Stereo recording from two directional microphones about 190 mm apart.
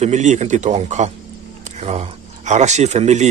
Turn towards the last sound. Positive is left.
turn(degrees=-35)  # may be behind; listen again after turning